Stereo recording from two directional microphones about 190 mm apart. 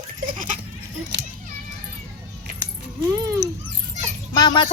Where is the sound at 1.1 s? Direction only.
65° right (ahead or behind).